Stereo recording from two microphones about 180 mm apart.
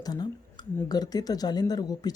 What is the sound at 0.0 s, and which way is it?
Speech, 20° left (ahead or behind).